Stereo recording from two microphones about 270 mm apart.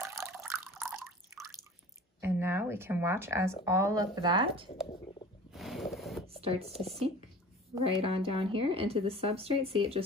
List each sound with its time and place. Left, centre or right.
0.1 s water: centre
0.7 s drip: centre
2.2 s speech: centre
5.5 s boat: centre
6.4 s speech: right
7.7 s a woman's voice: right